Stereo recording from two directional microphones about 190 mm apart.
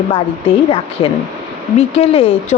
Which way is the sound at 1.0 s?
30° left (ahead or behind).